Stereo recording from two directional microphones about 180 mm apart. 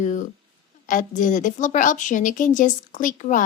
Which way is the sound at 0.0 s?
45° left (ahead or behind).